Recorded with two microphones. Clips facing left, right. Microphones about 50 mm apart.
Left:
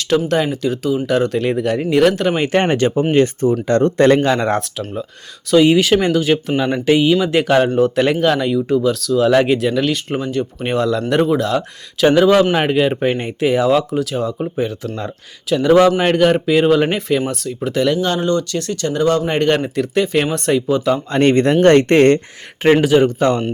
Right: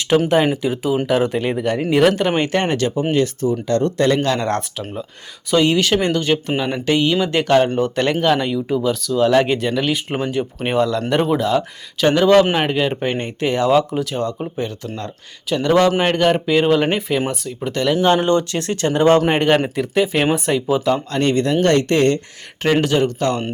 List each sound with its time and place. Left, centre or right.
0.1 s speech: right; by 2.4 s centre
2.6 s speech: centre
4.2 s speech: centre
5.6 s speech: centre
10.7 s speech: centre
18.0 s speech: right
19.3 s speech: centre
21.2 s speech: left
22.8 s speech: centre